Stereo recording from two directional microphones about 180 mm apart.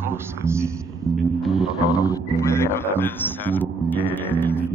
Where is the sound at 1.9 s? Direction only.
15° left (ahead or behind).